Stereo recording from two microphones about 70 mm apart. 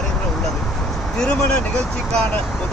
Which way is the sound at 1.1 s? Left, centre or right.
Centre.